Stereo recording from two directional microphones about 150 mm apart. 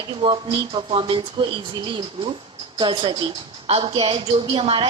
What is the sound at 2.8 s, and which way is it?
Speech, 30° right (ahead or behind).